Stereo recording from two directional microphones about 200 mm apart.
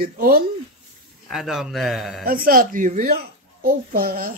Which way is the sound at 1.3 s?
Centre (ahead or behind).